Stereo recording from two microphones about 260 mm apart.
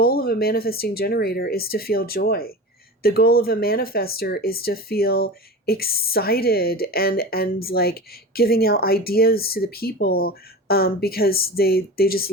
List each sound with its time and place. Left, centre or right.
0.0 s speech: left